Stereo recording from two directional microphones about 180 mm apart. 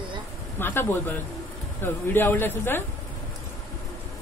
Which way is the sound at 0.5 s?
10° left (ahead or behind).